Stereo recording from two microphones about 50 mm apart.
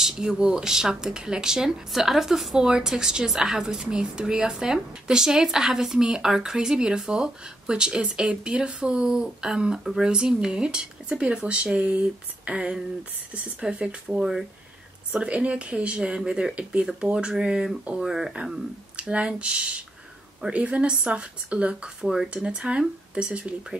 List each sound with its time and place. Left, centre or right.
0.0 s speech: centre
15.1 s speech: right
18.9 s speech: right
22.0 s speech: centre
22.3 s speech: right